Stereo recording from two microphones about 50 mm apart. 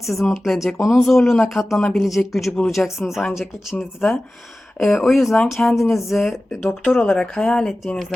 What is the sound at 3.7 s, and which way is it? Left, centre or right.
Speech, centre.